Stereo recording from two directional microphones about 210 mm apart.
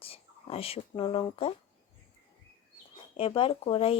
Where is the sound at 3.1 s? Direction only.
25° left (ahead or behind).